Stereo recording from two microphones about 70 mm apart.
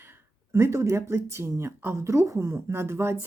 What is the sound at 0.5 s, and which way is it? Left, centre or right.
Speech, right.